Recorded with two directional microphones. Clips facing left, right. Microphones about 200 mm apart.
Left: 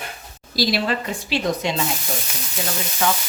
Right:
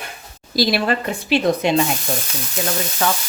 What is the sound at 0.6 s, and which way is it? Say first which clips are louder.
Speech: right 3 dB; 55° right (ahead or behind).